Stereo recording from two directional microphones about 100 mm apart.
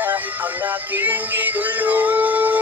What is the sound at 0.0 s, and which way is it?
Music, 20° right (ahead or behind).